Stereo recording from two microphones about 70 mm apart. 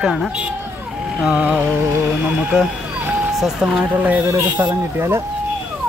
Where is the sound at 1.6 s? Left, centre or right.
Right.